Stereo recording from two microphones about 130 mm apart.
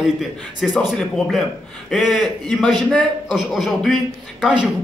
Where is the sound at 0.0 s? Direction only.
Centre (ahead or behind).